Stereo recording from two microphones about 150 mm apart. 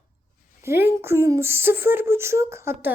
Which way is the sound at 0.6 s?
15° right (ahead or behind).